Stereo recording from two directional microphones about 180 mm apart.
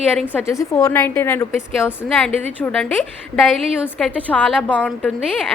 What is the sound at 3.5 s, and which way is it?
A woman's voice, centre (ahead or behind).